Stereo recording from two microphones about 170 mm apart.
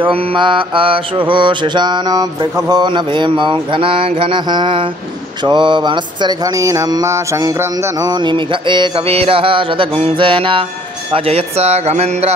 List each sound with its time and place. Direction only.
0.0 s mantra: 30° right (ahead or behind)
11.1 s speech: 35° right (ahead or behind)